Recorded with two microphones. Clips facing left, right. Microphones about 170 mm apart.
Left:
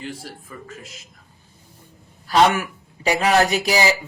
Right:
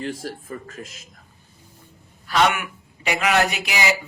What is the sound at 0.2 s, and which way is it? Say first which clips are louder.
Speech: right 5 dB; 45° right (ahead or behind).